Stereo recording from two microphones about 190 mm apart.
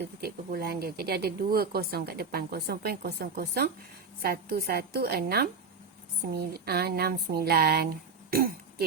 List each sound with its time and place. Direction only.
0.2 s speech: 55° right (ahead or behind)